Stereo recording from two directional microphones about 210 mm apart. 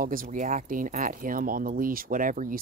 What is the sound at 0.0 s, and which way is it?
Speech, 40° right (ahead or behind).